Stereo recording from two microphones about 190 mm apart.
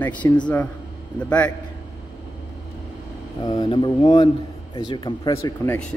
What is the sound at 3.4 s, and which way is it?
Speech, 25° left (ahead or behind).